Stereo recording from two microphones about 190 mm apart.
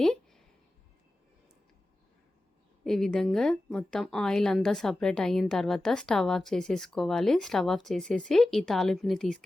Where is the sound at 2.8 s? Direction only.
5° left (ahead or behind).